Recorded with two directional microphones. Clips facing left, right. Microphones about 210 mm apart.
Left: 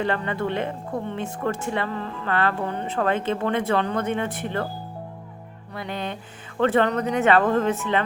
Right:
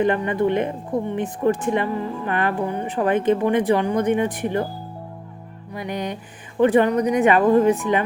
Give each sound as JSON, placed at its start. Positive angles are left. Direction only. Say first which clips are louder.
{"t": 0.0, "sound": "a woman's voice", "louder": "right 6 dB", "side_deg": -15}
{"t": 5.7, "sound": "a woman's voice", "louder": "right 3 dB", "side_deg": -15}